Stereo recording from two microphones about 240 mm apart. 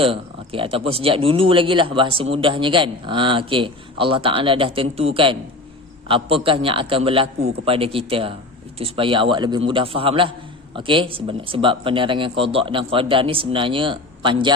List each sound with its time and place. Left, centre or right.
0.0 s a man's voice: right